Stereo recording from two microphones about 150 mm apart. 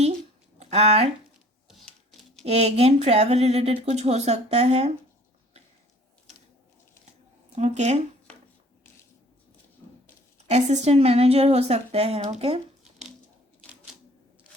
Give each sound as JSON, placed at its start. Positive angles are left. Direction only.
{"t": 0.6, "sound": "speech", "side_deg": -45}
{"t": 2.4, "sound": "a woman's voice", "side_deg": -45}
{"t": 7.5, "sound": "a woman's voice", "side_deg": -50}
{"t": 10.5, "sound": "a woman's voice", "side_deg": -45}